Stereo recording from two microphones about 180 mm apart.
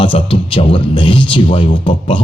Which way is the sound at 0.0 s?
30° left (ahead or behind).